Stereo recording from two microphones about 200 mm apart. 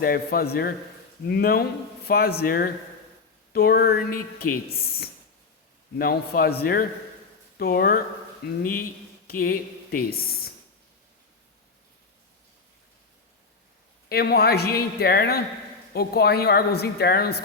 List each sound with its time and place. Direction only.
0.0 s a woman's voice: 50° left (ahead or behind)
14.1 s a woman's voice: 50° left (ahead or behind)